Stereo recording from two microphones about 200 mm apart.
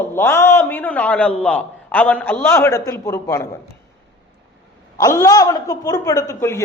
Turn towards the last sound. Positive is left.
turn(degrees=15)  # may be behind; listen again after turning